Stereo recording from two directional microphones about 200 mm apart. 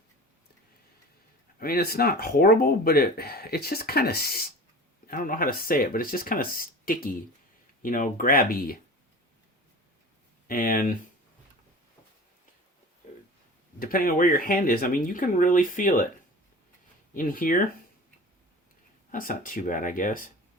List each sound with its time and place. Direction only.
1.5 s speech: 50° left (ahead or behind)
10.4 s speech: 45° left (ahead or behind)
13.7 s speech: 45° left (ahead or behind)
17.2 s speech: 45° left (ahead or behind)
19.1 s speech: 45° left (ahead or behind)